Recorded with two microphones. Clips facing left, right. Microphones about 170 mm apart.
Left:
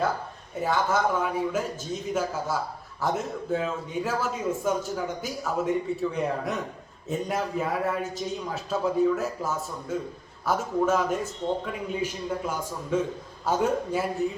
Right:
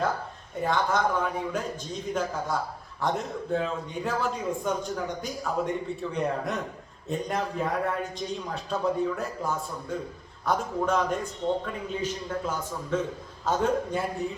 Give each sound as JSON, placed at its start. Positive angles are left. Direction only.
{"t": 0.6, "sound": "a man's voice", "side_deg": 5}